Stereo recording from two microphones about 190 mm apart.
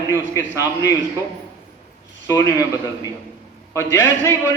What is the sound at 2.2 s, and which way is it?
Speech, 20° left (ahead or behind).